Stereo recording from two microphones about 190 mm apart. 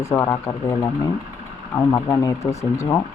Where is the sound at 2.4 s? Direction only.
35° left (ahead or behind).